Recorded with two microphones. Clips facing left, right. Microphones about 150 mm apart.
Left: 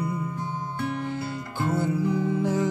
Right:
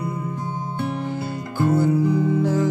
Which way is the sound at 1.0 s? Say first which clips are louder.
Right 3 dB; 20° right (ahead or behind).